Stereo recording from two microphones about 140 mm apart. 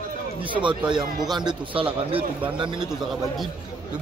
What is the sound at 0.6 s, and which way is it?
A man's voice, 35° right (ahead or behind).